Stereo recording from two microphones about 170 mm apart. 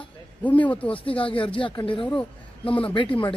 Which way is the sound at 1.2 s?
30° left (ahead or behind).